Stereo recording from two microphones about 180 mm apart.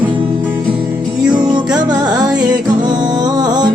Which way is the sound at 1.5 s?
25° right (ahead or behind).